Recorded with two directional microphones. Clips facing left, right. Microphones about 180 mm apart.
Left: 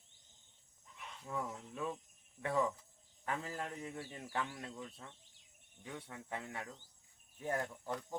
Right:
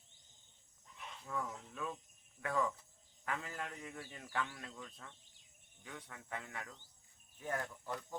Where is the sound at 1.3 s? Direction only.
20° left (ahead or behind).